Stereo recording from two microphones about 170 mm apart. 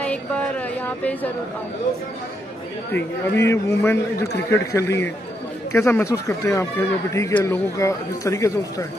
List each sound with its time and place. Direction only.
0.0 s music: 5° left (ahead or behind)
2.9 s speech: 15° left (ahead or behind)